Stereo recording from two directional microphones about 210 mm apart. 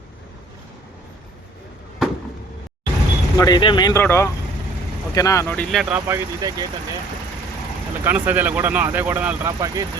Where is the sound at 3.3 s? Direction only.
20° left (ahead or behind).